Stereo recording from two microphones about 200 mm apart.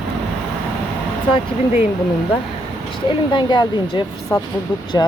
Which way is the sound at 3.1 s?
25° left (ahead or behind).